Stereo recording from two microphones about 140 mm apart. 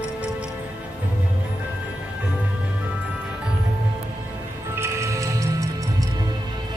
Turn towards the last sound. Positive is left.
turn(degrees=-25)  # may be behind; listen again after turning